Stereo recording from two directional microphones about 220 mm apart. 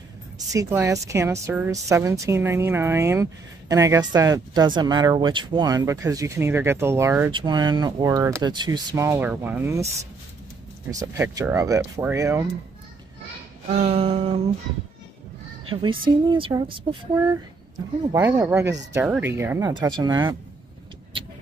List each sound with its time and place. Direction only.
0.5 s a woman's voice: 15° right (ahead or behind)
10.9 s a woman's voice: 15° right (ahead or behind)
13.7 s speech: 25° right (ahead or behind)
15.7 s a woman's voice: 25° right (ahead or behind)